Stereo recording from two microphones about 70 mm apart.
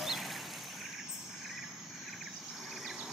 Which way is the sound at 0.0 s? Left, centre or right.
Centre.